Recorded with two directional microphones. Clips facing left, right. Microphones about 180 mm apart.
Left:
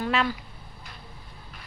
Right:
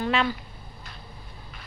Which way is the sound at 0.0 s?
5° left (ahead or behind).